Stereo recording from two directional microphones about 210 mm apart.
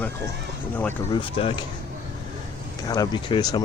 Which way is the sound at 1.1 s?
25° left (ahead or behind).